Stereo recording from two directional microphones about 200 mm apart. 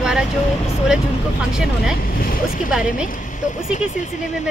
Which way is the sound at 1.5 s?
Centre (ahead or behind).